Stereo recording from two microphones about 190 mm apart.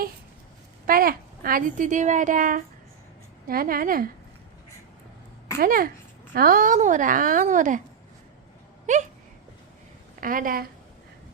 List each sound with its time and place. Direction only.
0.9 s a woman's voice: 50° right (ahead or behind)
5.5 s a woman's voice: 50° right (ahead or behind)
10.2 s a woman's voice: 45° right (ahead or behind)